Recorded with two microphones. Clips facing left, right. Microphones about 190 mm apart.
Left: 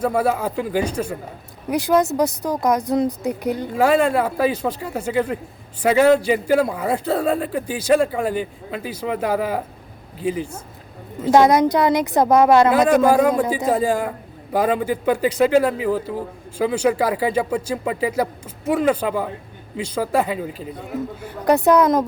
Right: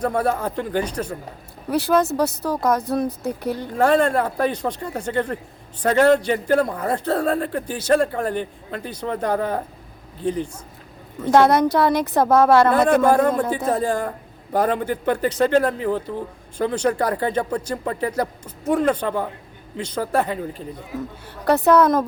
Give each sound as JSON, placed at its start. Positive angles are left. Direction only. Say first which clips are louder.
{"t": 0.0, "sound": "a man's voice", "louder": "left 2 dB", "side_deg": 10}
{"t": 12.8, "sound": "a man's voice", "louder": "left 1 dB", "side_deg": 5}
{"t": 21.4, "sound": "a man's voice", "louder": "left 1 dB", "side_deg": 15}